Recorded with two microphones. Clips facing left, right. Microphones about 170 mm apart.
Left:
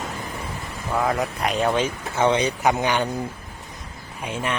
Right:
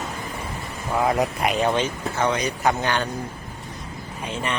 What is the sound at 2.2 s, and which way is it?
Speech, 30° left (ahead or behind).